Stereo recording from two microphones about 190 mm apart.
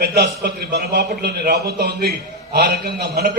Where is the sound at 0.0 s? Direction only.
55° right (ahead or behind).